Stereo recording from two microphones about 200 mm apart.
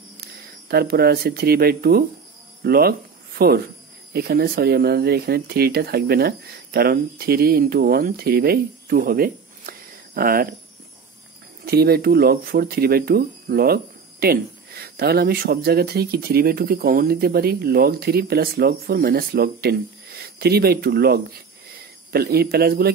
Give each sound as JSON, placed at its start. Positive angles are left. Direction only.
{"t": 0.2, "sound": "speech", "side_deg": -50}
{"t": 11.6, "sound": "speech", "side_deg": -50}